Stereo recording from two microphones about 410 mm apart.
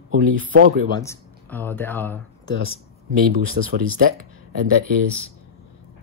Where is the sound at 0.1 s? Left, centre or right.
Centre.